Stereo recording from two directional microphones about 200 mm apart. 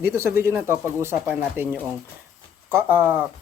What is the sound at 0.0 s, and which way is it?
Speech, 15° right (ahead or behind).